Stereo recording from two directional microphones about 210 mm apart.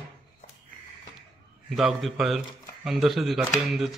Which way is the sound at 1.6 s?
Centre (ahead or behind).